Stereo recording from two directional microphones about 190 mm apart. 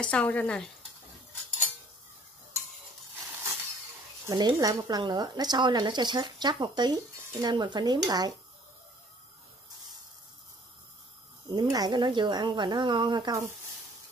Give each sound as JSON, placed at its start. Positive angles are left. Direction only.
{"t": 0.0, "sound": "speech", "side_deg": 5}
{"t": 4.3, "sound": "a woman's voice", "side_deg": -20}
{"t": 11.5, "sound": "a woman's voice", "side_deg": -20}